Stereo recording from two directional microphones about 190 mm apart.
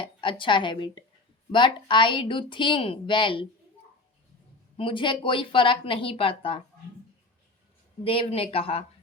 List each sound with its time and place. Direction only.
0.0 s a woman's voice: 25° left (ahead or behind)
4.8 s a woman's voice: 25° left (ahead or behind)
8.0 s speech: 30° left (ahead or behind)